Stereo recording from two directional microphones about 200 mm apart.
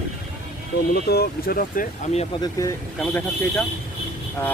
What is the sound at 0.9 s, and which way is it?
Speech, 50° left (ahead or behind).